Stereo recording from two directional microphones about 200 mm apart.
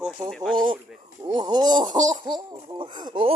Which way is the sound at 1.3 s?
20° right (ahead or behind).